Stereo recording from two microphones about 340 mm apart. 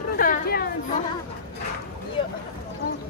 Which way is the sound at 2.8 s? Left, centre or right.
Left.